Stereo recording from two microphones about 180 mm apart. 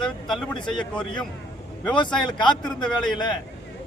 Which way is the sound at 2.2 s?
25° left (ahead or behind).